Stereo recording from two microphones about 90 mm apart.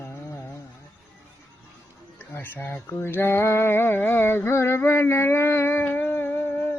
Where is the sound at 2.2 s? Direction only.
20° left (ahead or behind).